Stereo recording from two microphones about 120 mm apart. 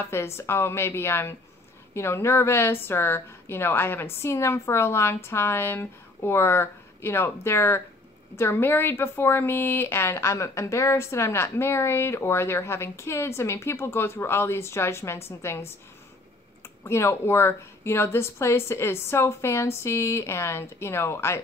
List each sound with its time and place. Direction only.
0.0 s a woman's voice: 20° left (ahead or behind)
16.8 s a woman's voice: 20° left (ahead or behind)